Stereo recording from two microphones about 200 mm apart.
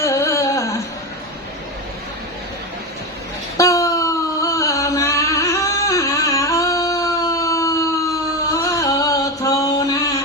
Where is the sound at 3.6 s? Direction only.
15° left (ahead or behind).